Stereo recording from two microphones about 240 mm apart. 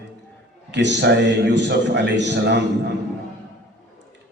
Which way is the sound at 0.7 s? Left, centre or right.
Right.